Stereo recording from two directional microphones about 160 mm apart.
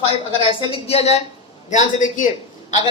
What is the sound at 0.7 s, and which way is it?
Speech, 40° left (ahead or behind).